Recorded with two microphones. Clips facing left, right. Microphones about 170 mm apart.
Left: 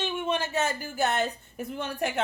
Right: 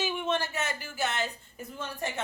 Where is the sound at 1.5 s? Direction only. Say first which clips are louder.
Left 6 dB; 65° left (ahead or behind).